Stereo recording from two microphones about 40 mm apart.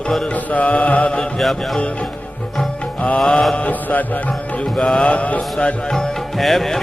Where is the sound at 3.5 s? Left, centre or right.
Left.